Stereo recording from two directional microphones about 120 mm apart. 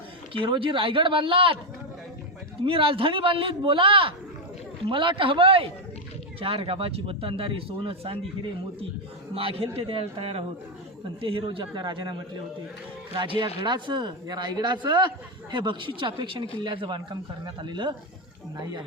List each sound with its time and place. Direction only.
0.3 s speech: 45° right (ahead or behind)
2.6 s speech: 50° right (ahead or behind)
9.3 s speech: 50° right (ahead or behind)
13.6 s speech: 40° right (ahead or behind)